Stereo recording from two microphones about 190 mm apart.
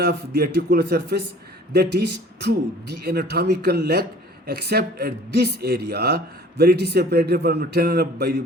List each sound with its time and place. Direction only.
0.0 s speech: 55° right (ahead or behind)